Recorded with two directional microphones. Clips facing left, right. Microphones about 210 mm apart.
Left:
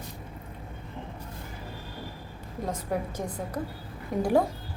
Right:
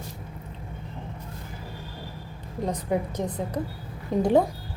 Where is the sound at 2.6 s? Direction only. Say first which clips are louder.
Right 4 dB; 20° right (ahead or behind).